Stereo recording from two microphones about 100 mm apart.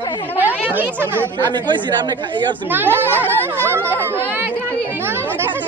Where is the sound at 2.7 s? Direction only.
20° right (ahead or behind).